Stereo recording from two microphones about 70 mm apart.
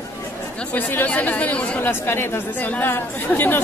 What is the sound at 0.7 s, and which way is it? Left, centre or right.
Speech, left.